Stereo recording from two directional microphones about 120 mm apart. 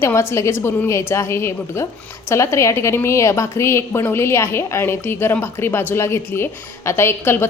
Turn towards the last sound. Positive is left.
turn(degrees=20)  # may be behind; listen again after turning